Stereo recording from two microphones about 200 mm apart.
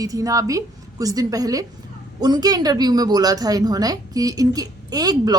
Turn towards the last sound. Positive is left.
turn(degrees=-20)  # may be behind; listen again after turning